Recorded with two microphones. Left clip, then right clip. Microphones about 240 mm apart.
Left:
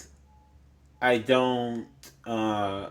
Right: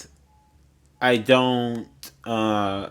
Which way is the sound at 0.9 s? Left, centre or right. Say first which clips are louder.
Right 4 dB; right.